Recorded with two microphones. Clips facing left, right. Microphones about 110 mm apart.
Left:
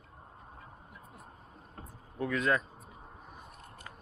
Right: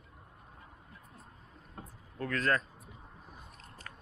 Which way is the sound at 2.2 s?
10° left (ahead or behind).